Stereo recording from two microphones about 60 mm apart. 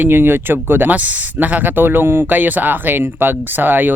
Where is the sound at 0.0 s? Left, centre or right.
Right.